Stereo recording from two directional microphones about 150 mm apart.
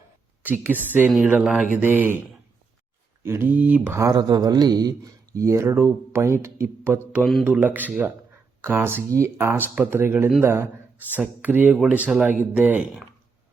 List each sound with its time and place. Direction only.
0.4 s speech: 10° right (ahead or behind)
3.2 s speech: 15° right (ahead or behind)